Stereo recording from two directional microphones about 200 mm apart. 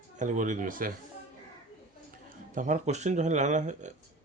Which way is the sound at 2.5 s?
40° right (ahead or behind).